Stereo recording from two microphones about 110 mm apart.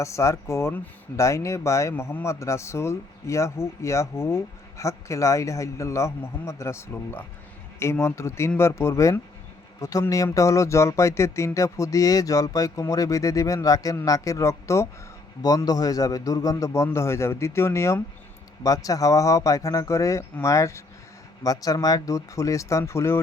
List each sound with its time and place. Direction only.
0.0 s speech: 25° left (ahead or behind)